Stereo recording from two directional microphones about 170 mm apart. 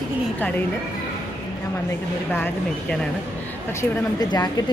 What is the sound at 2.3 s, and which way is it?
Speech, 10° left (ahead or behind).